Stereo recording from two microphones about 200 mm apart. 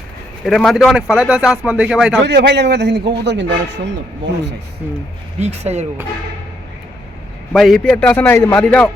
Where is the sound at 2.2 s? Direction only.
55° right (ahead or behind).